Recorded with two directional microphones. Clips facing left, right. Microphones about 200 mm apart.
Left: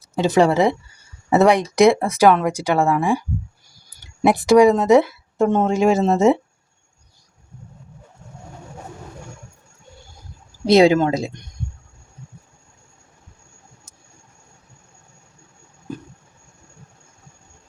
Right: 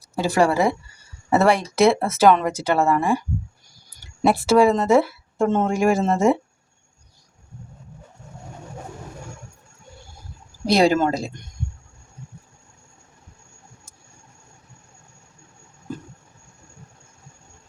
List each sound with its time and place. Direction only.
0.1 s speech: 20° left (ahead or behind)
10.7 s speech: 20° left (ahead or behind)